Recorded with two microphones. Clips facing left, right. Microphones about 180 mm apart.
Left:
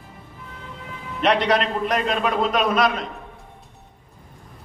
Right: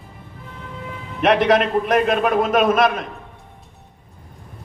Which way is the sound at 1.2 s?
50° right (ahead or behind).